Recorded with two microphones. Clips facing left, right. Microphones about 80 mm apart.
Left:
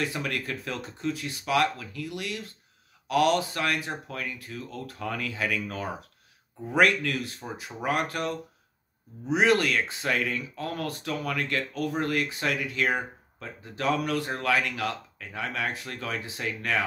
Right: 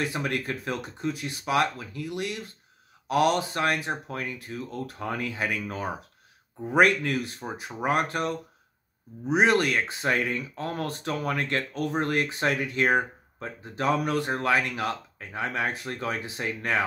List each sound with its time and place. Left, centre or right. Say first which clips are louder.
0.0 s speech: right 2 dB; right